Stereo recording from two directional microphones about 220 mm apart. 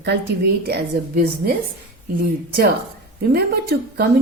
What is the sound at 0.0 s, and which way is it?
Speech, 50° right (ahead or behind).